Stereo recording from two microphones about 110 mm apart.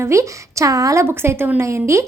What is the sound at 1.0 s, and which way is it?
A woman's voice, 20° right (ahead or behind).